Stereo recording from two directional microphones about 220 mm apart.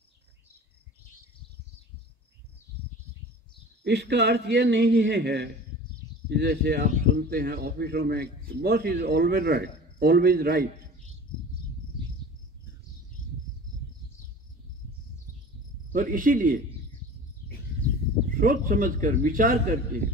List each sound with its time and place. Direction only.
3.8 s speech: 50° right (ahead or behind)
15.9 s a man's voice: 40° right (ahead or behind)
18.4 s a man's voice: 40° right (ahead or behind)